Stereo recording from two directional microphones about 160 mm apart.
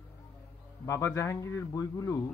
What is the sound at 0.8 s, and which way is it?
A man's voice, 20° left (ahead or behind).